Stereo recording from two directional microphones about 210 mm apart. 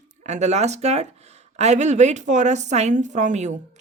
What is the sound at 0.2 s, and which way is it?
Speech, 35° right (ahead or behind).